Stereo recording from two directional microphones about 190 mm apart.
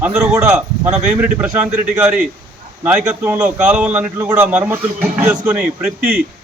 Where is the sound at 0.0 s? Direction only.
5° right (ahead or behind).